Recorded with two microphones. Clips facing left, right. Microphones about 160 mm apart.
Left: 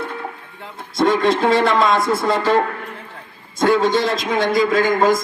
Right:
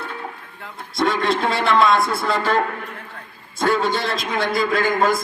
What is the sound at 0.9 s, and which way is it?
A man's voice, 20° left (ahead or behind).